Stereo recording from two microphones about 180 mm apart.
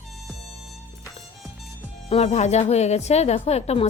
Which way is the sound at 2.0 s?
35° left (ahead or behind).